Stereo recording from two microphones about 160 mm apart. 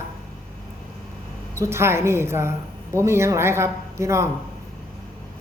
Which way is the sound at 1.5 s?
15° right (ahead or behind).